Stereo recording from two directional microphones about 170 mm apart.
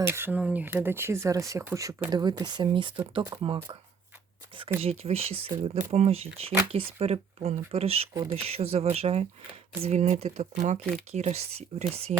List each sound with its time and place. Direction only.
0.0 s speech: 15° right (ahead or behind)
4.8 s speech: 35° right (ahead or behind)